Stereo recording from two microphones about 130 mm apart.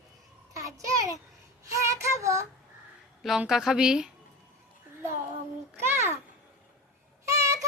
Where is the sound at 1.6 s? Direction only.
25° right (ahead or behind).